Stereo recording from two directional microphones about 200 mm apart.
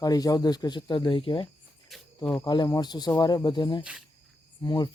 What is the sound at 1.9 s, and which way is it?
Speech, centre (ahead or behind).